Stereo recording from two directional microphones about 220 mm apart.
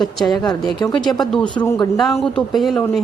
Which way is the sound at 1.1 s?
10° left (ahead or behind).